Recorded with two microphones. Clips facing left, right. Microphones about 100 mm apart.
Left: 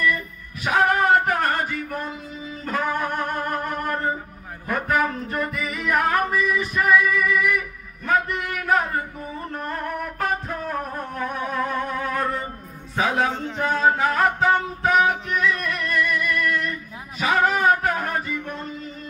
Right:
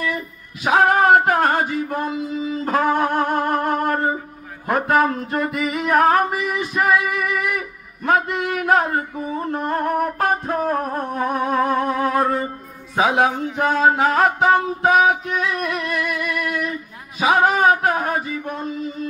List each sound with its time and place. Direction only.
0.0 s a sound: 20° right (ahead or behind)
2.8 s wind instrument: 20° right (ahead or behind)
3.7 s a sound: 20° right (ahead or behind)
5.0 s music: 25° right (ahead or behind)
5.9 s singing: 40° right (ahead or behind)
6.2 s male singing: 20° right (ahead or behind)
6.9 s music: 20° right (ahead or behind)
9.8 s music: 60° right (ahead or behind)
10.2 s music: 30° right (ahead or behind)
13.0 s a sound: 15° right (ahead or behind)
16.3 s music: 15° right (ahead or behind)
17.2 s a sound: 15° right (ahead or behind)